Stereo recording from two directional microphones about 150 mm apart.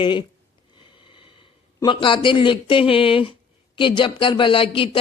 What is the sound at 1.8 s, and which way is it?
Speech, 35° left (ahead or behind).